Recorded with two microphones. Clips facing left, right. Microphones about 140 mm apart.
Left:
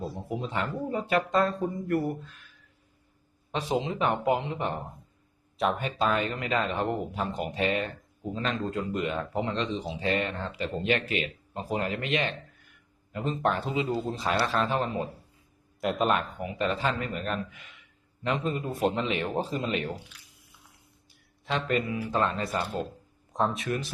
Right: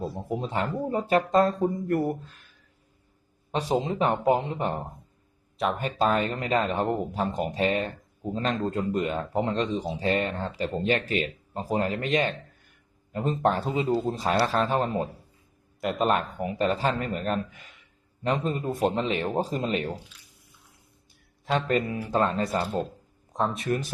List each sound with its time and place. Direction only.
0.3 s speech: 40° right (ahead or behind)
3.5 s speech: 40° right (ahead or behind)
5.5 s speech: centre (ahead or behind)
5.8 s speech: 40° right (ahead or behind)
15.8 s speech: centre (ahead or behind)
16.0 s speech: 40° right (ahead or behind)
21.4 s speech: 45° right (ahead or behind)
23.3 s speech: centre (ahead or behind)
23.6 s speech: 40° right (ahead or behind)